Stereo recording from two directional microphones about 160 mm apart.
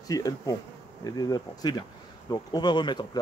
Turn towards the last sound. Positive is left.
turn(degrees=30)  # may be behind; listen again after turning